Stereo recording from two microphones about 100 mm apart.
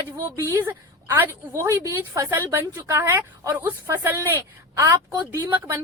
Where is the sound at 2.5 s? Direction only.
20° right (ahead or behind).